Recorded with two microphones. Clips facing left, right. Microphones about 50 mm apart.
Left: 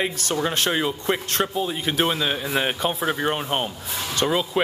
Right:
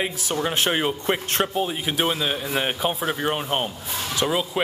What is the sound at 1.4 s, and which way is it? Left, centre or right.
A man's voice, centre.